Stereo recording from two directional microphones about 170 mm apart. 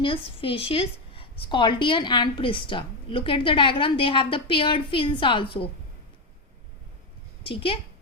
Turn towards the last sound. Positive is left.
turn(degrees=30)  # may be behind; listen again after turning